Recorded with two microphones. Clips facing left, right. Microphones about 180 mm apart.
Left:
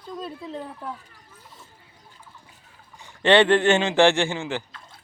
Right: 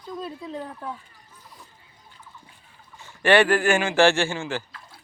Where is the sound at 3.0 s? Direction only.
20° left (ahead or behind).